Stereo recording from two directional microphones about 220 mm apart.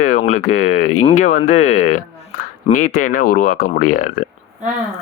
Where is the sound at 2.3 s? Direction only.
40° left (ahead or behind).